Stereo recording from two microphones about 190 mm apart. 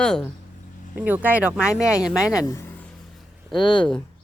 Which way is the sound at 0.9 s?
10° right (ahead or behind).